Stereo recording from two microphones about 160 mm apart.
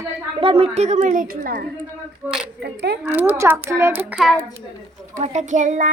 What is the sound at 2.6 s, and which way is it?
Speech, 90° right.